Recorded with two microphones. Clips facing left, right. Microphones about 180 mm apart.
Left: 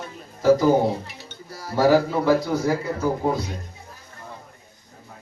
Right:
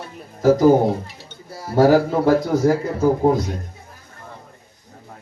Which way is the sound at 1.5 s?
25° right (ahead or behind).